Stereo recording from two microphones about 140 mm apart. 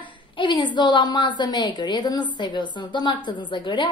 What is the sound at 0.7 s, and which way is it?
A woman's voice, 35° left (ahead or behind).